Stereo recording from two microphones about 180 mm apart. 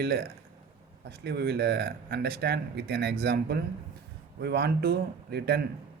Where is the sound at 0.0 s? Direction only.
65° right (ahead or behind).